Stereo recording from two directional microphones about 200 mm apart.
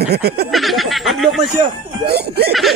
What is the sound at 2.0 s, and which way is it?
Speech, 50° right (ahead or behind).